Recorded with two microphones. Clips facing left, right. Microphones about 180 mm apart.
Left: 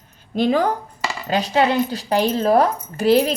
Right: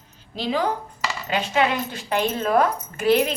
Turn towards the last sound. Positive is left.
turn(degrees=35)  # may be behind; listen again after turning